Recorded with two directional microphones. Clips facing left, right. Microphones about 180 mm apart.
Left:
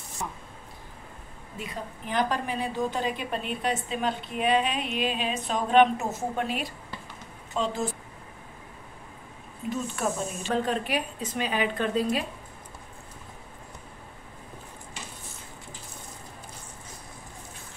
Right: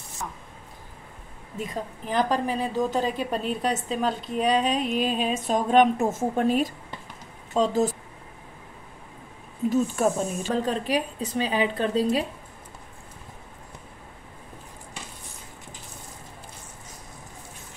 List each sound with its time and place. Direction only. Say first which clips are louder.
1.6 s a woman's voice: right 5 dB; 40° right (ahead or behind)
9.7 s a woman's voice: right 7 dB; 45° right (ahead or behind)